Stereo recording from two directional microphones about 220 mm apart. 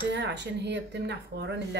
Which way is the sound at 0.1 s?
50° right (ahead or behind).